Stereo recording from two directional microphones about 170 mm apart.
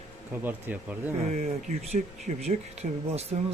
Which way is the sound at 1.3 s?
40° right (ahead or behind).